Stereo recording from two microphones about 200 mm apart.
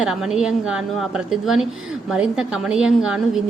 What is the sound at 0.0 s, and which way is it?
A woman's voice, centre (ahead or behind).